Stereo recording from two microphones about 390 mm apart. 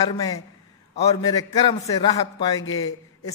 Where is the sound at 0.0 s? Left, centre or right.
Centre.